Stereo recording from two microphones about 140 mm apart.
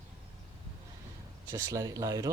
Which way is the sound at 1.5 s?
25° right (ahead or behind).